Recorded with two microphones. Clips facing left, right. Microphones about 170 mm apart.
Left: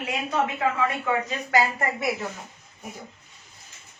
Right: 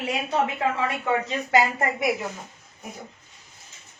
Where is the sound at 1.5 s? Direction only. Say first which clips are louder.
Right 2 dB; 20° right (ahead or behind).